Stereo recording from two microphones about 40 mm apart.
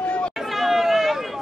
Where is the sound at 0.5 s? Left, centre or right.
Centre.